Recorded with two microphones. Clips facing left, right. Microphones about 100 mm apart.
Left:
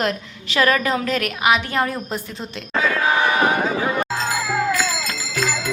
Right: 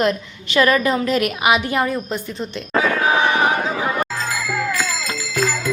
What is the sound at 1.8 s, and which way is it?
Speech, centre (ahead or behind).